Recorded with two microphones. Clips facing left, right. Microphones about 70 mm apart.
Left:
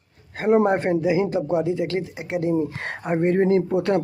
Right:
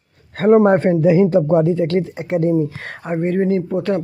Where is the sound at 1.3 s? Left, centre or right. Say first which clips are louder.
Right 7 dB; right.